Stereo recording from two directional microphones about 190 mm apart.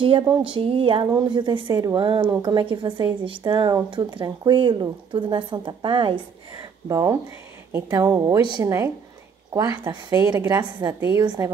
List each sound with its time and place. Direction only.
0.0 s speech: 25° right (ahead or behind)